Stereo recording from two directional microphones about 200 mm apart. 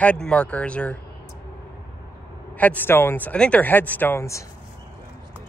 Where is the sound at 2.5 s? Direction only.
10° left (ahead or behind).